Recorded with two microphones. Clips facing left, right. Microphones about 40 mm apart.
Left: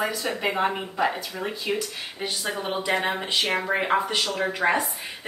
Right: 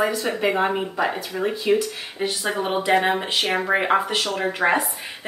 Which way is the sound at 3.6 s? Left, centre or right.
Right.